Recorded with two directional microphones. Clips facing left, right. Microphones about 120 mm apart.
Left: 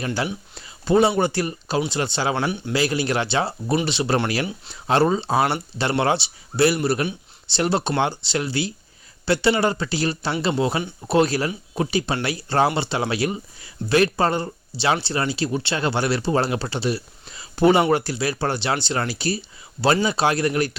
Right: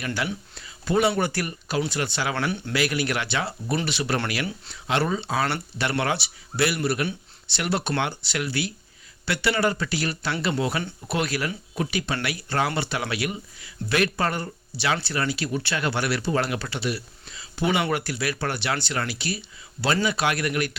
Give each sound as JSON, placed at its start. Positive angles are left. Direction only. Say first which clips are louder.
{"t": 0.0, "sound": "speech", "louder": "left 4 dB", "side_deg": 30}
{"t": 0.5, "sound": "a sound", "louder": "left 6 dB", "side_deg": 30}
{"t": 1.2, "sound": "speech", "louder": "left 4 dB", "side_deg": 25}
{"t": 2.7, "sound": "speech", "louder": "left 4 dB", "side_deg": 30}